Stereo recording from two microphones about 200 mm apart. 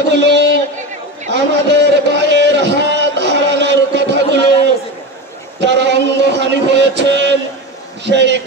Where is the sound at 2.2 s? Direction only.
60° right (ahead or behind).